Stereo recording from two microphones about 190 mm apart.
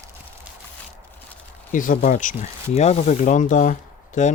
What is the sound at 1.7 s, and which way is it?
Speech, 45° left (ahead or behind).